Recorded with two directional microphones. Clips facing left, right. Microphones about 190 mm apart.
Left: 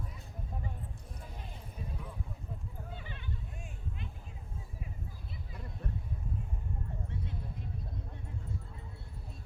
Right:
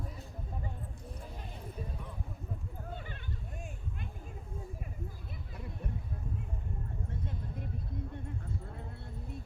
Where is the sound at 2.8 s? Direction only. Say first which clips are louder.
Right 4 dB; 45° right (ahead or behind).